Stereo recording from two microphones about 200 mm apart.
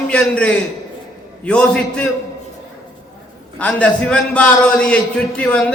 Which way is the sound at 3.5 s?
5° left (ahead or behind).